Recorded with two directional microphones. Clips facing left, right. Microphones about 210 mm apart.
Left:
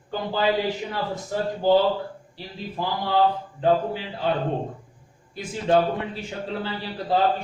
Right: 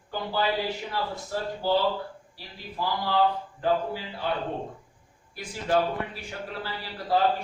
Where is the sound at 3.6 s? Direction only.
20° left (ahead or behind).